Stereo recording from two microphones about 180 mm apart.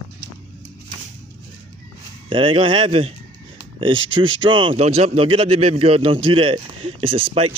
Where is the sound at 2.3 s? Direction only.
30° right (ahead or behind).